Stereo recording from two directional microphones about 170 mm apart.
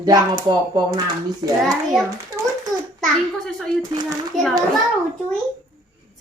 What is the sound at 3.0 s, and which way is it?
A child's voice, centre (ahead or behind).